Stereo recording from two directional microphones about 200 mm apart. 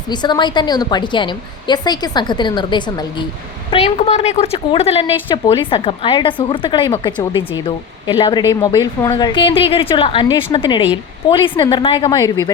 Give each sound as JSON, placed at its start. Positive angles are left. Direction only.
{"t": 0.1, "sound": "a woman's voice", "side_deg": 20}